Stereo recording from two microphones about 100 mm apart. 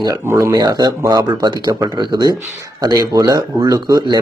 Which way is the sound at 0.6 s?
45° right (ahead or behind).